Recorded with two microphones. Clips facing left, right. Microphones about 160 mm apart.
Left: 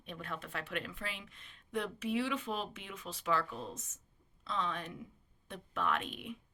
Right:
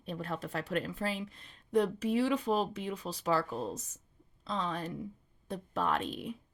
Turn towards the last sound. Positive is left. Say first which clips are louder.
# right 3 dB
turn(degrees=-35)  # may be behind; listen again after turning